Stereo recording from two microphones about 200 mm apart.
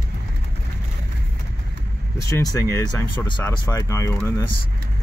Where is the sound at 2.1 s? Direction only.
15° left (ahead or behind).